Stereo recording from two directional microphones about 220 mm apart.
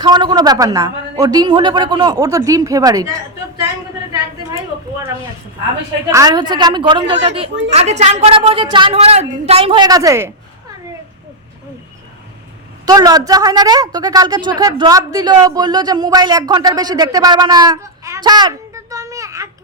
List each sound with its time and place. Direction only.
0.0 s a woman's voice: 20° right (ahead or behind)
6.1 s a woman's voice: 15° right (ahead or behind)
12.8 s a woman's voice: 15° right (ahead or behind)